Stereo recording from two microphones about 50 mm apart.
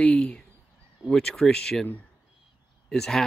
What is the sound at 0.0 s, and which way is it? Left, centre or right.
Speech, left.